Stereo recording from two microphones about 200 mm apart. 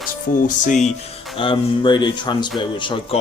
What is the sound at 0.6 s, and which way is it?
Speech, 35° left (ahead or behind).